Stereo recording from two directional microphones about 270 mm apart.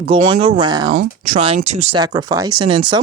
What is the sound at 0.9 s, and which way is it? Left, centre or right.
Speech, right.